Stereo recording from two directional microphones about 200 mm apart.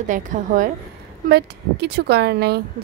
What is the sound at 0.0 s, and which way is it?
Speech, 40° right (ahead or behind).